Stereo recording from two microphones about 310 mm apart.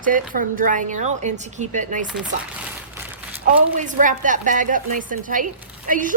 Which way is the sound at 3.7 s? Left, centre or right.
Right.